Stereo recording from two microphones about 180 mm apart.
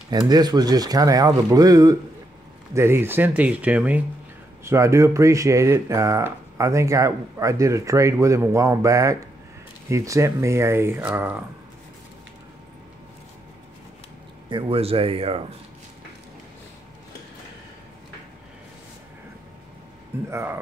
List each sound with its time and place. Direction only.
0.3 s a man's voice: 20° right (ahead or behind)
14.5 s speech: 35° right (ahead or behind)
20.2 s speech: 15° right (ahead or behind)